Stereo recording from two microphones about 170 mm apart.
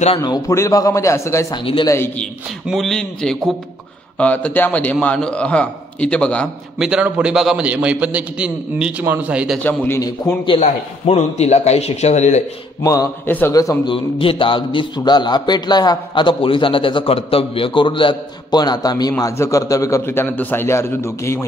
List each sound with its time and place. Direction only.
0.2 s a man's voice: 20° left (ahead or behind)
1.6 s speech: 30° left (ahead or behind)
2.7 s a man's voice: centre (ahead or behind)
6.8 s a man's voice: 5° right (ahead or behind)
9.6 s a man's voice: 15° left (ahead or behind)
10.6 s speech: 40° left (ahead or behind)
12.8 s a man's voice: 20° left (ahead or behind)
13.9 s a man's voice: 30° left (ahead or behind); by 21.5 s 15° left (ahead or behind)